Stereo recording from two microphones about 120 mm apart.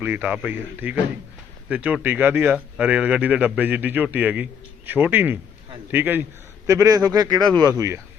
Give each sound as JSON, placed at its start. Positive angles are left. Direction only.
{"t": 0.0, "sound": "a man's voice", "side_deg": -15}
{"t": 6.7, "sound": "a man's voice", "side_deg": -30}